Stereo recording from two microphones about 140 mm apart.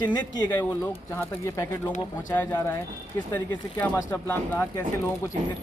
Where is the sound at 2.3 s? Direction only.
15° left (ahead or behind).